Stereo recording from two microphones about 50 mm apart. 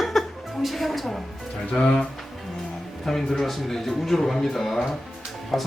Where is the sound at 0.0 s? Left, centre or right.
Centre.